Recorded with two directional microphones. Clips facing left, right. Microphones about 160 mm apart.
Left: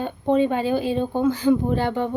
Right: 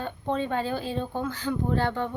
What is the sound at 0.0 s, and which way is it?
Speech, 15° left (ahead or behind).